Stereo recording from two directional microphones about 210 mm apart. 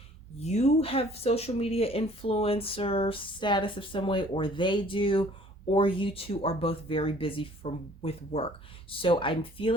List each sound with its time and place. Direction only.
0.3 s speech: 30° left (ahead or behind)